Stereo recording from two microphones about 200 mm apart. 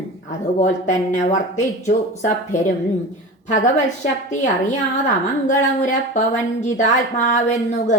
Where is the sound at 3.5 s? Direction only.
40° left (ahead or behind).